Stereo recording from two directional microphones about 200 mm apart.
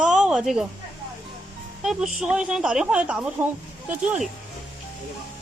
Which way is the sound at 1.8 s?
Centre (ahead or behind).